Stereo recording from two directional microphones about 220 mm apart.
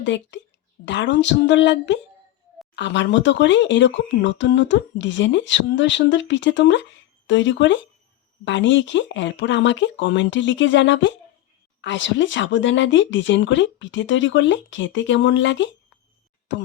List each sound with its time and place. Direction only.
0.0 s speech: 55° left (ahead or behind)